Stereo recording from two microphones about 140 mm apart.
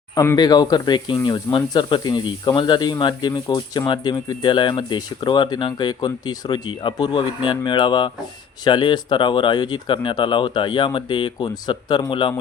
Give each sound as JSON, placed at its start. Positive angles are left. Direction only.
{"t": 0.2, "sound": "speech", "side_deg": 25}